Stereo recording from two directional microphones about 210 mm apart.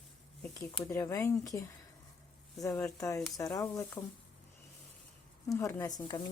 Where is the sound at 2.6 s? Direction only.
15° left (ahead or behind).